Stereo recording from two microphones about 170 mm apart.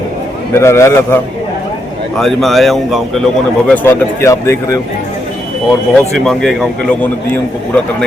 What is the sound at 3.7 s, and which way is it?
A man's voice, 15° left (ahead or behind).